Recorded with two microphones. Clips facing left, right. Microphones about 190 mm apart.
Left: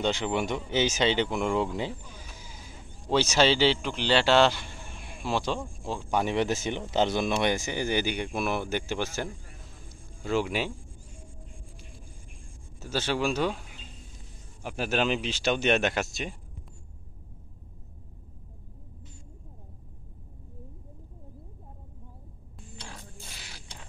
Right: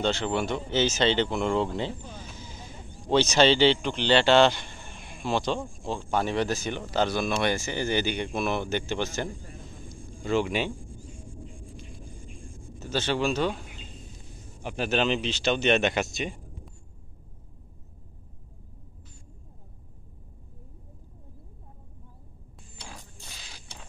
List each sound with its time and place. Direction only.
0.0 s speech: 15° left (ahead or behind)
2.3 s a sound: 10° left (ahead or behind)
3.1 s speech: 5° left (ahead or behind)
9.8 s a sound: 5° left (ahead or behind)
12.7 s speech: 10° left (ahead or behind)
14.6 s speech: 5° left (ahead or behind)
22.8 s mechanisms: 10° right (ahead or behind)